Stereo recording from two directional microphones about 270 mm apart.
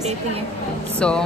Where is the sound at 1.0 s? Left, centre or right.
Centre.